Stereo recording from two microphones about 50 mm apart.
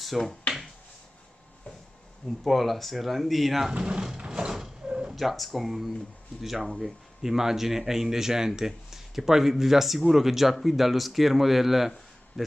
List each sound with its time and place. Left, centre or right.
0.0 s speech: centre
2.4 s speech: centre
3.7 s speech: centre
4.2 s mechanisms: centre
5.1 s speech: centre